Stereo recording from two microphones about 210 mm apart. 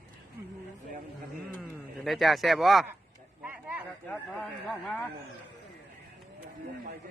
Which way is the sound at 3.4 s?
5° right (ahead or behind).